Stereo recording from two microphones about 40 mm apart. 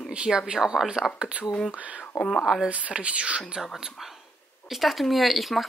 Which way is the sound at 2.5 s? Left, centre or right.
Centre.